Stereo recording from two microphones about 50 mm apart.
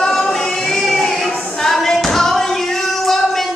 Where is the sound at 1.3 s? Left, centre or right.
Left.